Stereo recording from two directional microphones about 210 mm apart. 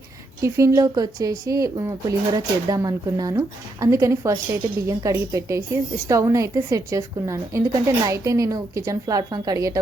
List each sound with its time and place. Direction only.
0.4 s speech: 15° right (ahead or behind)